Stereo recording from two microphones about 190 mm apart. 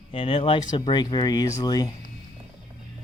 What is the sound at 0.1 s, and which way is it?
Speech, 30° left (ahead or behind).